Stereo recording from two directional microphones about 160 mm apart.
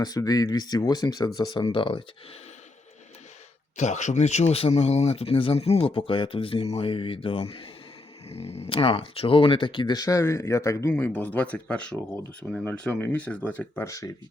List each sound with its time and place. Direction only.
0.0 s speech: 25° left (ahead or behind)
3.8 s speech: 50° left (ahead or behind); by 14.2 s 20° left (ahead or behind)